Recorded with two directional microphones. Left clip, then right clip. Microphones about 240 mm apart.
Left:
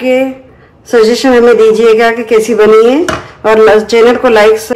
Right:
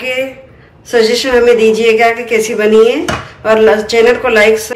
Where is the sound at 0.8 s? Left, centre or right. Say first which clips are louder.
Left 4 dB; left.